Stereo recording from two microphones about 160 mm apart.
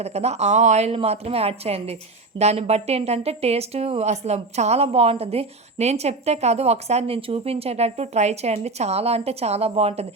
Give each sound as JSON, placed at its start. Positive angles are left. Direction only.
{"t": 0.0, "sound": "speech", "side_deg": -40}